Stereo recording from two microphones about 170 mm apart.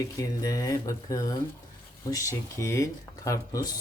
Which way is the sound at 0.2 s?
20° left (ahead or behind).